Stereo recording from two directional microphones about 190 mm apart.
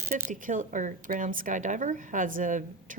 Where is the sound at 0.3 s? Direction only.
45° right (ahead or behind).